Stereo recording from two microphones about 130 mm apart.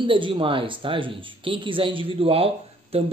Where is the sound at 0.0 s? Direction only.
40° right (ahead or behind).